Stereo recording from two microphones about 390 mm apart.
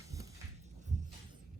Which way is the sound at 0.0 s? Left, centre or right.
Centre.